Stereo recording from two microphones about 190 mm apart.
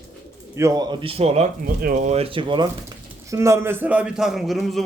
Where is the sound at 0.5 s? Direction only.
15° right (ahead or behind); by 4.8 s centre (ahead or behind).